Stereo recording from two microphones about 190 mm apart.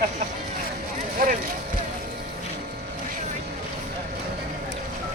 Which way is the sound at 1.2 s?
50° right (ahead or behind).